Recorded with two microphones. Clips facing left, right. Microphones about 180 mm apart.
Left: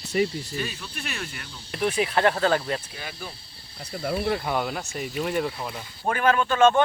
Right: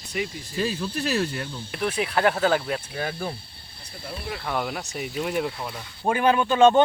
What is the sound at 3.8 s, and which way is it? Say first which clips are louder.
Speech: left 10 dB; 65° left (ahead or behind).